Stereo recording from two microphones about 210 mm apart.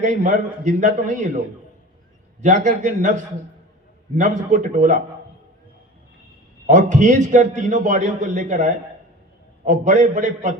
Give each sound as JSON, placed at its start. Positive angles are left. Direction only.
{"t": 0.0, "sound": "a man's voice", "side_deg": -35}
{"t": 2.4, "sound": "a man's voice", "side_deg": -35}
{"t": 4.2, "sound": "a man's voice", "side_deg": -35}
{"t": 6.7, "sound": "a man's voice", "side_deg": -35}